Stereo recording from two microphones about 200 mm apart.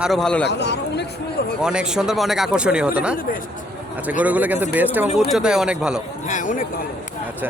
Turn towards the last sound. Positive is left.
turn(degrees=40)  # may be behind; listen again after turning